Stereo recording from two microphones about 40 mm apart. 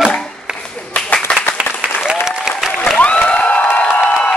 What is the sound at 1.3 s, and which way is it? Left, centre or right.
Applause, left.